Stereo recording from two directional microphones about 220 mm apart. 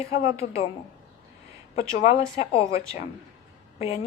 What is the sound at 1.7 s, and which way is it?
Speech, 30° left (ahead or behind).